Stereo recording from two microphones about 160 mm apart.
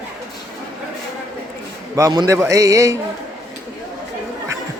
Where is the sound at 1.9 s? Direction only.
20° right (ahead or behind).